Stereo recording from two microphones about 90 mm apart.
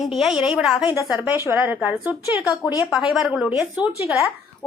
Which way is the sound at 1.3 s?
20° right (ahead or behind).